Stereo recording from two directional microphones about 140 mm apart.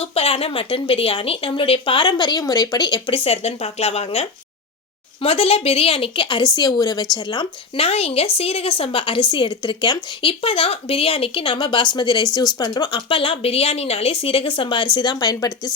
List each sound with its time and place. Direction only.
0.0 s speech: 45° left (ahead or behind); by 15.7 s 25° left (ahead or behind)